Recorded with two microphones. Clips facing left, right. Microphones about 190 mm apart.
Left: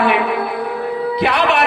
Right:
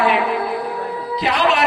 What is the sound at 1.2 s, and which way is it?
Speech, 60° left (ahead or behind).